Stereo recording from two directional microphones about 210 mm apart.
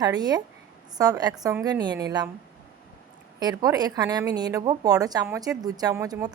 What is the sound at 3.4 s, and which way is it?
A woman's voice, 20° right (ahead or behind).